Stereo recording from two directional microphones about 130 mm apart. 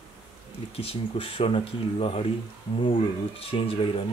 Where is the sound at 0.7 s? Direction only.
45° left (ahead or behind).